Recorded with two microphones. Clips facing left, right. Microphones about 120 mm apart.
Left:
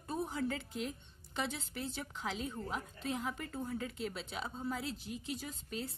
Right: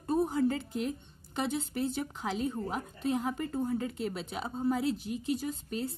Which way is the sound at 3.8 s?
50° right (ahead or behind).